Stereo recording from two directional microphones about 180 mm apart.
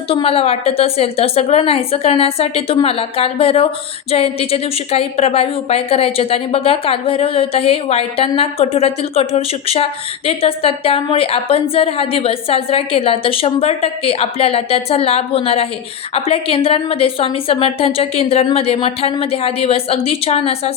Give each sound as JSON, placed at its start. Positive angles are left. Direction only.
{"t": 0.1, "sound": "speech", "side_deg": 30}